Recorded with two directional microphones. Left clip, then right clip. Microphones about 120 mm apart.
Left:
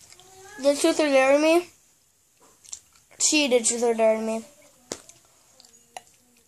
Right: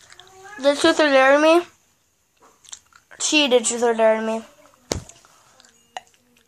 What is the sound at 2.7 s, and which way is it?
Speech, 15° left (ahead or behind).